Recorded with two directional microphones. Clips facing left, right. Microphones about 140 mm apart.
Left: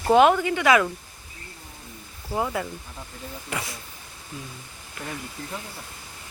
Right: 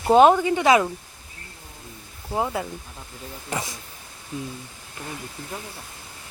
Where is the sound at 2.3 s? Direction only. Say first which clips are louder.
Right 1 dB; 20° right (ahead or behind).